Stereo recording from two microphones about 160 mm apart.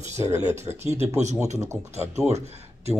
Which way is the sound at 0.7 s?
15° right (ahead or behind).